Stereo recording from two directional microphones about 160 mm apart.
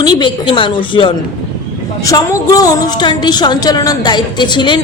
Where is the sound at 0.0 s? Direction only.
30° left (ahead or behind).